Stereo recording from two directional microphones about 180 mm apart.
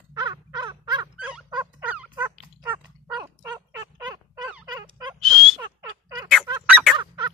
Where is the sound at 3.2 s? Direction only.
20° right (ahead or behind).